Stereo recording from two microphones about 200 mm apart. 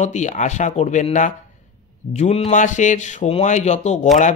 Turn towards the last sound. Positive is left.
turn(degrees=35)  # may be behind; listen again after turning